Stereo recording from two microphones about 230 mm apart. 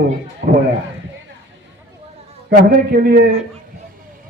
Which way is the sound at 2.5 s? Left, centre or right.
Right.